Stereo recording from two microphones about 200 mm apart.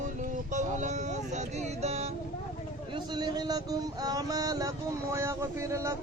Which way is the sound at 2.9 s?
20° right (ahead or behind).